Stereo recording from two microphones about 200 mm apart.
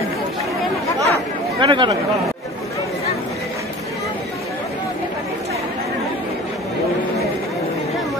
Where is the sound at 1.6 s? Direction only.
25° right (ahead or behind).